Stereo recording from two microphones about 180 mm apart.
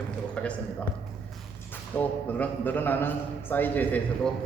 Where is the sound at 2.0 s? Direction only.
10° left (ahead or behind).